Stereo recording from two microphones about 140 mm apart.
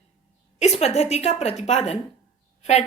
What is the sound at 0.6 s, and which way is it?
A woman's voice, 50° left (ahead or behind).